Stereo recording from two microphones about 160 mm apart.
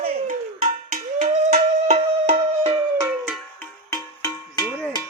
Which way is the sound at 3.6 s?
20° left (ahead or behind).